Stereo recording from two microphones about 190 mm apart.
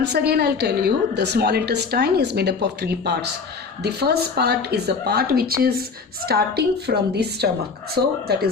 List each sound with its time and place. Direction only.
0.0 s a woman's voice: 60° right (ahead or behind)